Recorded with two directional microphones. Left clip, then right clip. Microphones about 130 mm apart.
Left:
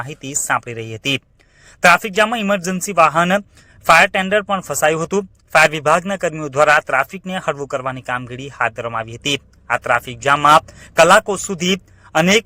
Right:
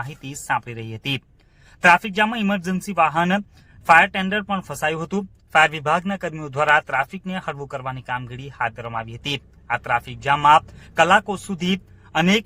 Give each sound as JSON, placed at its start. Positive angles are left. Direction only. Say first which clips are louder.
{"t": 0.0, "sound": "a man's voice", "louder": "left 7 dB", "side_deg": 30}